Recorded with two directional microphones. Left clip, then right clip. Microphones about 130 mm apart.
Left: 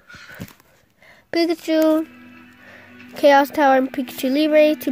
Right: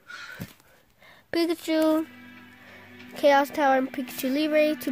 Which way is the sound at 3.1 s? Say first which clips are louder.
Left 7 dB; 20° left (ahead or behind).